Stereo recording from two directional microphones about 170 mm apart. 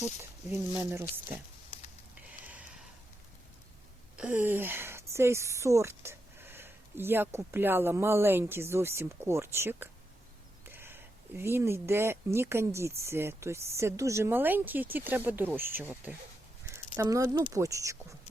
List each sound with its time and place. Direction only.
0.8 s speech: 15° right (ahead or behind)
2.2 s a sound: 10° right (ahead or behind)
4.2 s speech: 10° right (ahead or behind)